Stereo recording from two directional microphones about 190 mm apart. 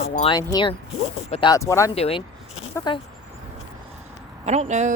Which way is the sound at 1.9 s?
30° left (ahead or behind).